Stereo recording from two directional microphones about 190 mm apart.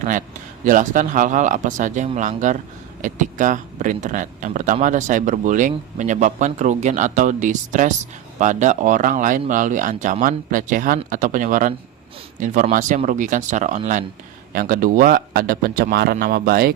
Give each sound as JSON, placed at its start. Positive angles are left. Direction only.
{"t": 0.0, "sound": "speech", "side_deg": -40}